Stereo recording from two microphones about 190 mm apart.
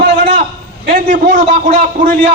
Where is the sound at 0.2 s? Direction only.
40° right (ahead or behind).